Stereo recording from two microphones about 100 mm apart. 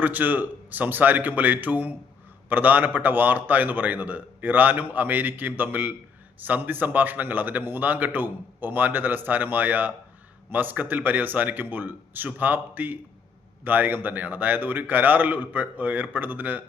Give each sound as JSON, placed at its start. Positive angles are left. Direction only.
{"t": 0.0, "sound": "a man's voice", "side_deg": -15}